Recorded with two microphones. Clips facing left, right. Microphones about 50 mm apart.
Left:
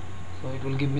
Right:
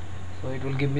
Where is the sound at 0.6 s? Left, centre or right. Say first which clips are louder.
Even; centre.